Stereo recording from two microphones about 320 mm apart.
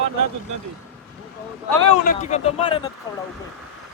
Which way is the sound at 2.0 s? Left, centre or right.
Left.